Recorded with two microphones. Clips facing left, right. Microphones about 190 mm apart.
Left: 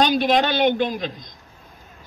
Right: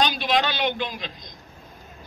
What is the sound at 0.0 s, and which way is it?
A man's voice, 50° left (ahead or behind).